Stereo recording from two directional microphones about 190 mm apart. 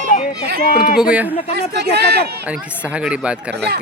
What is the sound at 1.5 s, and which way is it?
Speech, 60° right (ahead or behind).